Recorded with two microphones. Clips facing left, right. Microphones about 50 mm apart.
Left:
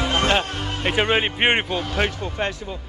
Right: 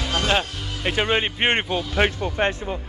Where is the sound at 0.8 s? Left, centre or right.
Centre.